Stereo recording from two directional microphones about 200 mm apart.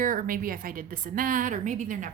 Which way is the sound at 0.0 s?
45° right (ahead or behind).